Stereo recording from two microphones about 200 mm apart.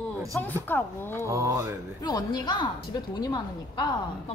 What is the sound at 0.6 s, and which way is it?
Speech, 10° left (ahead or behind).